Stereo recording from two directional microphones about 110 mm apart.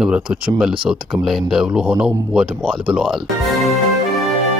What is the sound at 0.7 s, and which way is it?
Speech, 50° right (ahead or behind).